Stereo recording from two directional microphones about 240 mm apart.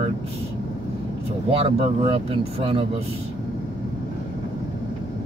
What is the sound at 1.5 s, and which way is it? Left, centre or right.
Speech, right.